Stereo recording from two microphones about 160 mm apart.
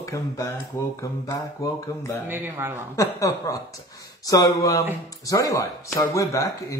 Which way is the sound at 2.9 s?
20° left (ahead or behind).